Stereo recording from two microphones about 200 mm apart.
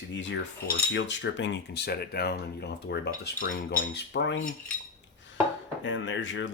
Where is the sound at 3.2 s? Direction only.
45° left (ahead or behind).